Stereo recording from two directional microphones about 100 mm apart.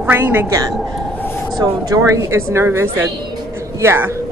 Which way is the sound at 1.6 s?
35° right (ahead or behind).